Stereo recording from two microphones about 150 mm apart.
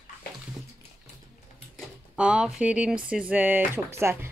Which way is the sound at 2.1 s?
5° right (ahead or behind).